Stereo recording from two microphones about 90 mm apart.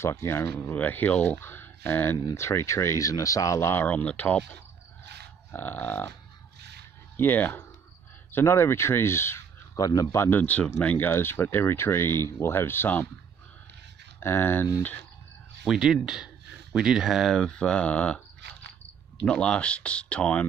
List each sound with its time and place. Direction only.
0.0 s speech: 30° left (ahead or behind)
0.6 s speech: 20° left (ahead or behind)
3.8 s speech: 20° left (ahead or behind)
5.5 s speech: 20° left (ahead or behind)
7.2 s speech: 20° left (ahead or behind)
9.8 s speech: 45° left (ahead or behind)
10.1 s speech: 25° left (ahead or behind)
14.2 s speech: 25° left (ahead or behind)
15.6 s speech: 5° right (ahead or behind)
17.4 s speech: 10° left (ahead or behind)
19.2 s speech: 10° left (ahead or behind)